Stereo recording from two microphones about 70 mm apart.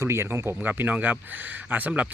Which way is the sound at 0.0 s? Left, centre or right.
Right.